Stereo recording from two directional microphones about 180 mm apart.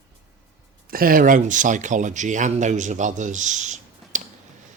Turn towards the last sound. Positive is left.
turn(degrees=-45)  # may be behind; listen again after turning